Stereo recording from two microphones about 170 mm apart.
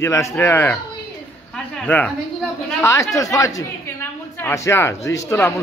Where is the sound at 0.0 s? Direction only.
15° left (ahead or behind).